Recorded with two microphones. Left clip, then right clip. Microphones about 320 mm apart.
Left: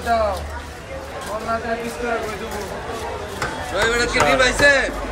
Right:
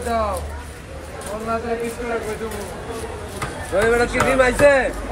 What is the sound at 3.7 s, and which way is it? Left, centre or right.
A man's voice, centre.